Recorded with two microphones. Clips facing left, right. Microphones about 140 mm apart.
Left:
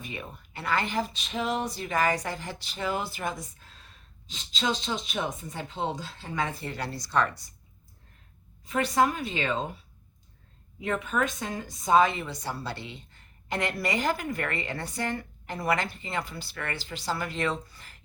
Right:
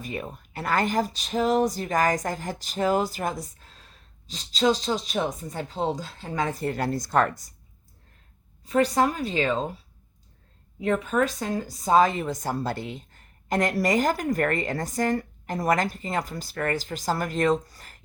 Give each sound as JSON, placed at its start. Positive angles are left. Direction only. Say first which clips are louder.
{"t": 0.0, "sound": "speech", "louder": "right 6 dB", "side_deg": -40}
{"t": 8.6, "sound": "speech", "louder": "right 3 dB", "side_deg": -35}
{"t": 10.8, "sound": "a woman's voice", "louder": "right 5 dB", "side_deg": -35}